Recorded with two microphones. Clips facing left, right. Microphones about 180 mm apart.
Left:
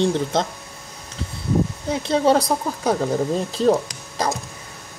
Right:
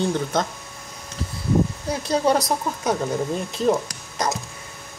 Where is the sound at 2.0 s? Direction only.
25° left (ahead or behind).